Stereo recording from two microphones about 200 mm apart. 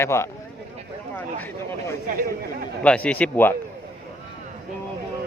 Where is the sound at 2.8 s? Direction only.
5° left (ahead or behind).